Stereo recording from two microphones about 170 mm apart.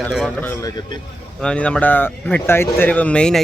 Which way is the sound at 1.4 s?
5° left (ahead or behind).